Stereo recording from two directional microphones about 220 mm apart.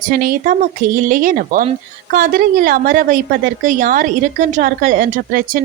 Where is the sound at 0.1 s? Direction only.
40° right (ahead or behind).